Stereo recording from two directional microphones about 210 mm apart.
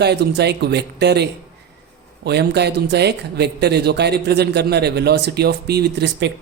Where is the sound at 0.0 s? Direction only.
55° right (ahead or behind).